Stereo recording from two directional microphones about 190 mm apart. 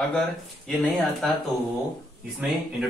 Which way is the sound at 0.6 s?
Centre (ahead or behind).